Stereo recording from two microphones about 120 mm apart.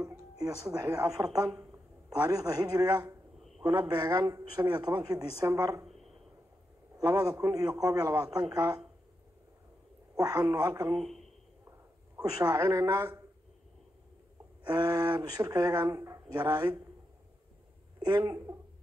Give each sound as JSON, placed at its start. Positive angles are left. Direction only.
{"t": 0.0, "sound": "speech", "side_deg": -25}
{"t": 1.5, "sound": "speech", "side_deg": -20}
{"t": 2.0, "sound": "speech", "side_deg": -30}
{"t": 7.0, "sound": "a man's voice", "side_deg": -30}
{"t": 10.1, "sound": "speech", "side_deg": -30}
{"t": 10.9, "sound": "a man's voice", "side_deg": 0}
{"t": 12.2, "sound": "a man's voice", "side_deg": -30}
{"t": 14.7, "sound": "speech", "side_deg": -35}
{"t": 17.9, "sound": "speech", "side_deg": -35}